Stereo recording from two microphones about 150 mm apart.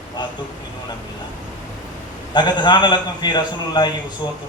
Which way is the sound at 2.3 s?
30° left (ahead or behind).